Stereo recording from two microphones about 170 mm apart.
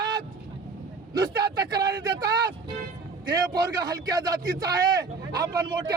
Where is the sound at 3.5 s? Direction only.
25° right (ahead or behind).